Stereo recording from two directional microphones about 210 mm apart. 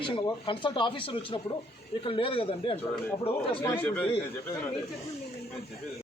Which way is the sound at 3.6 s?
10° left (ahead or behind).